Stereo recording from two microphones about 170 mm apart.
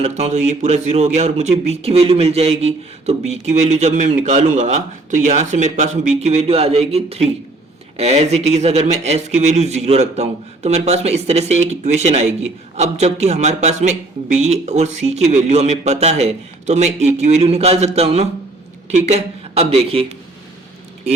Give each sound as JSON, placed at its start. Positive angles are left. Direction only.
{"t": 0.0, "sound": "speech", "side_deg": -40}